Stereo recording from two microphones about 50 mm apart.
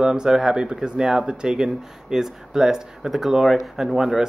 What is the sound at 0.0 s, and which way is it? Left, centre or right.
Speech, centre.